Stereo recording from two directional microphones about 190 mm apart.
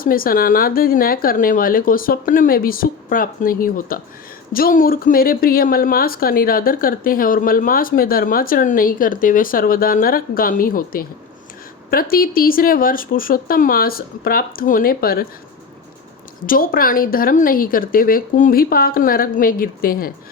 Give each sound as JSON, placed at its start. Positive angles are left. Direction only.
{"t": 0.0, "sound": "a woman's voice", "side_deg": 50}
{"t": 16.5, "sound": "a woman's voice", "side_deg": 50}